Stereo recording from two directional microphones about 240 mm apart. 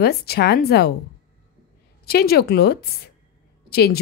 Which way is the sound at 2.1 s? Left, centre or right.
Left.